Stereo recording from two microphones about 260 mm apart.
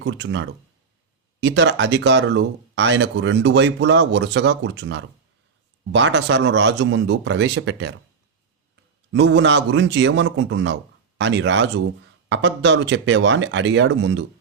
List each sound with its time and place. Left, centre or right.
0.0 s speech: right
9.1 s speech: right